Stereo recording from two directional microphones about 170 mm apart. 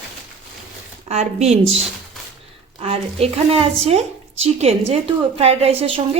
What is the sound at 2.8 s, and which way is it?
Speech, 35° right (ahead or behind).